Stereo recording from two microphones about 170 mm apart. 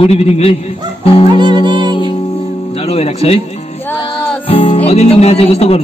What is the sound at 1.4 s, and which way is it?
Music, 25° right (ahead or behind).